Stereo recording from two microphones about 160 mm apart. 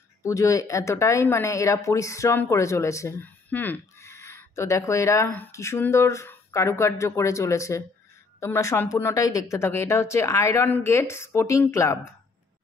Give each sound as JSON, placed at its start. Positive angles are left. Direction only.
{"t": 0.2, "sound": "speech", "side_deg": 20}